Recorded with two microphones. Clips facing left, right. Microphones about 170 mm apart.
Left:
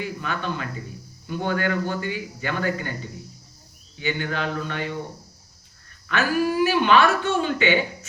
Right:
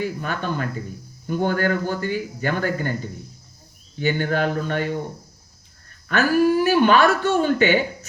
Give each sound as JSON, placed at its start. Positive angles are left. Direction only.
{"t": 0.0, "sound": "speech", "side_deg": -45}
{"t": 6.1, "sound": "speech", "side_deg": -45}